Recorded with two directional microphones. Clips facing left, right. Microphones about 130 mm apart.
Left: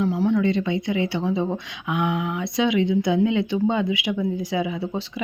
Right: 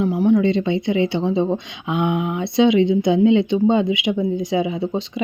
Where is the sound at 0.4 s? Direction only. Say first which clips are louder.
Right 4 dB; 25° right (ahead or behind).